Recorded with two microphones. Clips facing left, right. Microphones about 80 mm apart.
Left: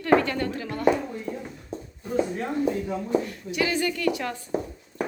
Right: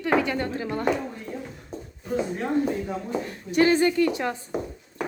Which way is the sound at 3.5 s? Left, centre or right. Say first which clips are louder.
Right 7 dB; right.